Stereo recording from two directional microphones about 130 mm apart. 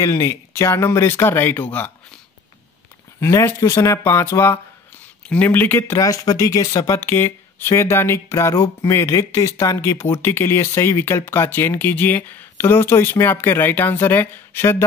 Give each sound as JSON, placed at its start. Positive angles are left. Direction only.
{"t": 0.0, "sound": "speech", "side_deg": 25}
{"t": 3.2, "sound": "speech", "side_deg": 20}